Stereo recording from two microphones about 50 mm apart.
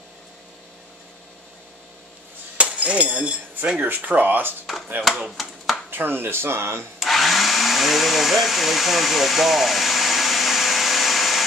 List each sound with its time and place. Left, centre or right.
2.5 s a sound: right
3.8 s speech: right
5.1 s speech: centre
5.9 s speech: right
7.0 s blender: centre